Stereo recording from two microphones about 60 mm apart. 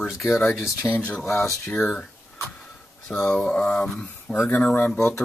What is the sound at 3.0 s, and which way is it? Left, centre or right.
Speech, centre.